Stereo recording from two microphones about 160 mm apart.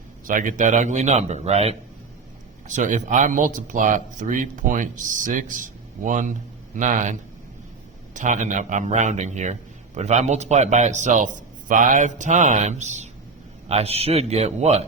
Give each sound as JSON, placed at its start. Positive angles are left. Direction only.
{"t": 0.3, "sound": "a man's voice", "side_deg": -55}